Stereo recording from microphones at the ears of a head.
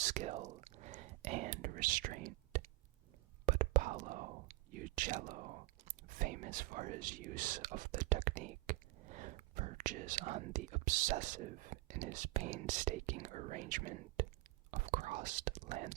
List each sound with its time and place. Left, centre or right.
0.0 s whispering: right
6.1 s speech: right